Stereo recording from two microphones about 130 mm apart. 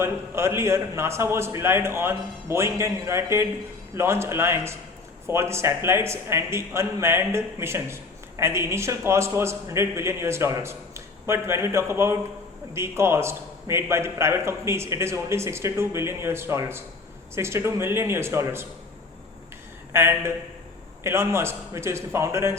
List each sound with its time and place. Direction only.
0.0 s a man's voice: 20° right (ahead or behind)
19.9 s a man's voice: 20° right (ahead or behind)